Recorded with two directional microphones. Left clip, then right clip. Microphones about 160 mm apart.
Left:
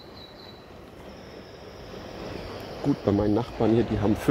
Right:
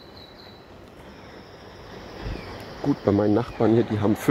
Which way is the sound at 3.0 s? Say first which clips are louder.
Right 4 dB; 25° right (ahead or behind).